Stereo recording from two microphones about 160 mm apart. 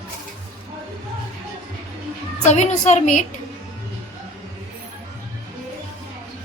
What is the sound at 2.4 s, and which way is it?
Speech, 45° left (ahead or behind).